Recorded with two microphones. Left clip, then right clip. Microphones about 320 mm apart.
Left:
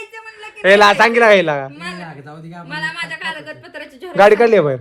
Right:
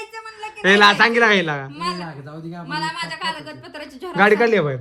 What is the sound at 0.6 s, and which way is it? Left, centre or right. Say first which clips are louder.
Speech: left 3 dB; centre.